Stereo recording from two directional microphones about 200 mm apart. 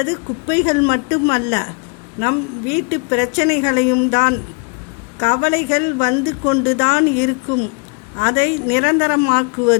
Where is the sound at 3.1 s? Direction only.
35° left (ahead or behind).